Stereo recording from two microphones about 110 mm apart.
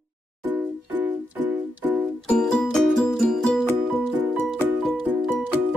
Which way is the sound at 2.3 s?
5° left (ahead or behind).